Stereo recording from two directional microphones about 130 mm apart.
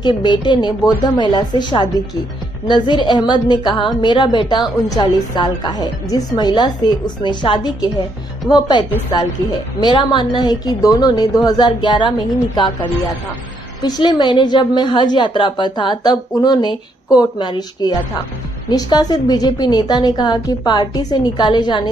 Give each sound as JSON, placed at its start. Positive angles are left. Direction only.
{"t": 0.0, "sound": "a woman's voice", "side_deg": 35}
{"t": 13.8, "sound": "a woman's voice", "side_deg": 35}